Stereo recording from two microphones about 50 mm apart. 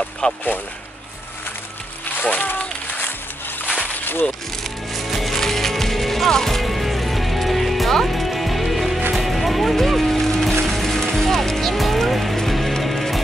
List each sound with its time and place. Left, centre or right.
0.2 s speech: left
2.2 s a sound: left
4.9 s music: centre